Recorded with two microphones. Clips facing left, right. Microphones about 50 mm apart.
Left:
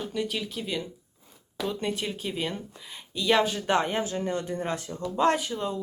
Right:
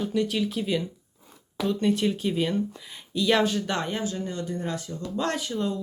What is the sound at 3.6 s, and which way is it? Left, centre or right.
Speech, left.